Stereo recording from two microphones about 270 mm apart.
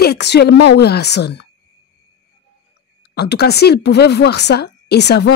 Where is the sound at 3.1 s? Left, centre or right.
Left.